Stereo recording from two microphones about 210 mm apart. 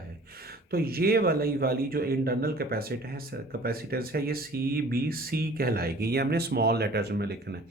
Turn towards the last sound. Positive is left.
turn(degrees=-50)  # may be behind; listen again after turning